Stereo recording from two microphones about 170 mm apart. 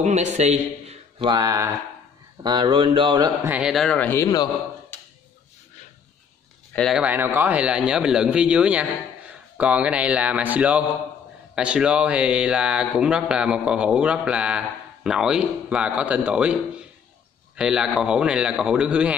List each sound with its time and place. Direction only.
0.0 s a man's voice: 40° right (ahead or behind)
1.2 s speech: 20° right (ahead or behind)
3.4 s speech: 5° right (ahead or behind); by 4.5 s 20° left (ahead or behind)
4.9 s a sound: 15° left (ahead or behind)
6.7 s speech: 5° left (ahead or behind)
7.0 s a man's voice: 10° right (ahead or behind)